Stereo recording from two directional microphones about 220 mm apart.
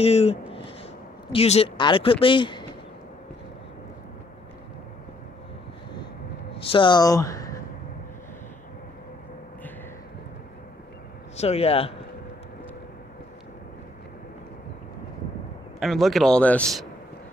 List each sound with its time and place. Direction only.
0.0 s speech: 30° left (ahead or behind)
6.5 s speech: 25° left (ahead or behind)
11.3 s speech: 30° left (ahead or behind)
15.8 s a man's voice: centre (ahead or behind)